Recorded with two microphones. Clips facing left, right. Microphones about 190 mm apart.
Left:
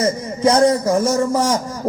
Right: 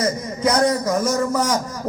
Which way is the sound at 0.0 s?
30° left (ahead or behind).